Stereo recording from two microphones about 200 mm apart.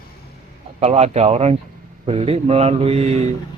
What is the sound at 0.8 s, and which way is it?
Speech, 30° right (ahead or behind).